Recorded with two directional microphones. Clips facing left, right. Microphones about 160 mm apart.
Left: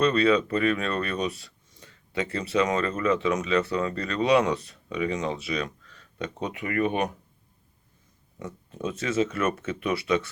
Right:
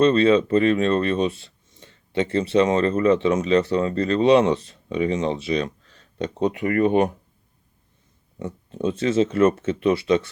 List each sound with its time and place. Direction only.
0.0 s speech: 25° right (ahead or behind)
8.4 s speech: 30° right (ahead or behind)